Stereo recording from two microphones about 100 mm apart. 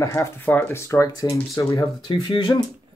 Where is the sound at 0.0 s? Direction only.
30° left (ahead or behind).